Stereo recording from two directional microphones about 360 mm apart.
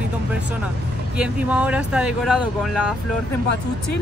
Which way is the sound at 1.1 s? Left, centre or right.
Centre.